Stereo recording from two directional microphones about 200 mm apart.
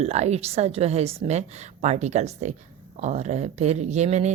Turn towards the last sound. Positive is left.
turn(degrees=-35)  # may be behind; listen again after turning